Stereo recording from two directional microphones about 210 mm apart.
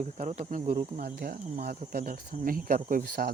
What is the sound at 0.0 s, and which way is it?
Speech, 35° right (ahead or behind).